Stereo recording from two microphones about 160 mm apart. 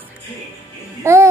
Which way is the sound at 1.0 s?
15° right (ahead or behind).